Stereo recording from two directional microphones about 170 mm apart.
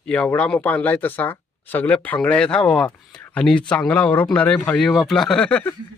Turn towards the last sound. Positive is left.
turn(degrees=5)  # may be behind; listen again after turning